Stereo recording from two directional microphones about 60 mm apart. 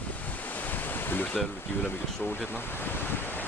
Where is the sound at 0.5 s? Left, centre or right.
Left.